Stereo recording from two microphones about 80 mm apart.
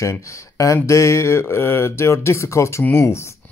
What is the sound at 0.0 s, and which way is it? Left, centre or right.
Speech, left.